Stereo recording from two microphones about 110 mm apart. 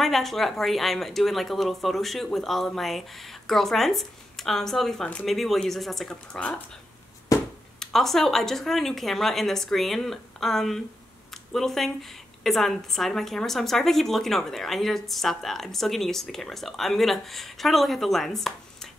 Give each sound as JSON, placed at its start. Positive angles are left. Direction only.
{"t": 0.0, "sound": "a woman's voice", "side_deg": 0}
{"t": 7.3, "sound": "a sound", "side_deg": 30}
{"t": 7.8, "sound": "a woman's voice", "side_deg": 5}